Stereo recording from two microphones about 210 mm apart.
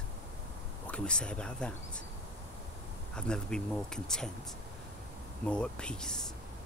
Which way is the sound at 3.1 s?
5° left (ahead or behind).